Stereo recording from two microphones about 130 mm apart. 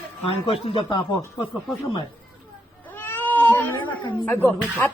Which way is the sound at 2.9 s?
15° left (ahead or behind).